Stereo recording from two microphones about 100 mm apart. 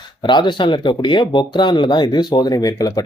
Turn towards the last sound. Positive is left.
turn(degrees=35)  # may be behind; listen again after turning